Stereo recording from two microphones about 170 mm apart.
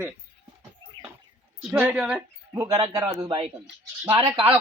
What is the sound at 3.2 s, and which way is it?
Speech, 30° right (ahead or behind).